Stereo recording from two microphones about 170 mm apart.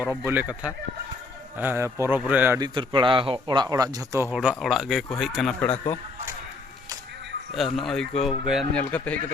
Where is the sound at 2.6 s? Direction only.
30° right (ahead or behind).